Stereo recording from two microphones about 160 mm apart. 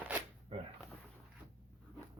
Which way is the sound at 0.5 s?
40° right (ahead or behind).